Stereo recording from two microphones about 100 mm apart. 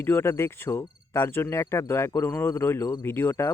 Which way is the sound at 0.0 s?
25° left (ahead or behind).